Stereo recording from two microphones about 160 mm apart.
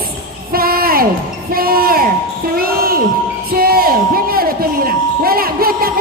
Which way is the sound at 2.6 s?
70° right (ahead or behind).